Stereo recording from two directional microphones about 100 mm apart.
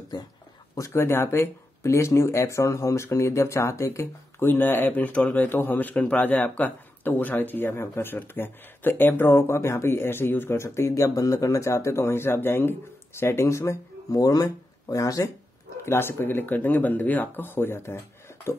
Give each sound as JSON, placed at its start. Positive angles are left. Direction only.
{"t": 0.1, "sound": "speech", "side_deg": 45}
{"t": 0.7, "sound": "speech", "side_deg": 30}
{"t": 15.8, "sound": "speech", "side_deg": 25}